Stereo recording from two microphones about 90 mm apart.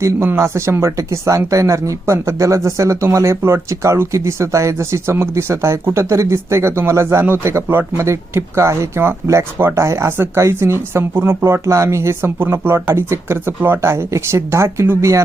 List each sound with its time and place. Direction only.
0.0 s speech: 25° right (ahead or behind)